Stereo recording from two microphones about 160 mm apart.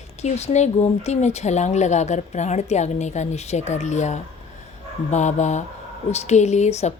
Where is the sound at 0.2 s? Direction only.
45° left (ahead or behind).